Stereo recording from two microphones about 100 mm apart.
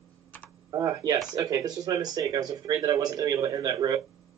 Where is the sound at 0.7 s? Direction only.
35° right (ahead or behind).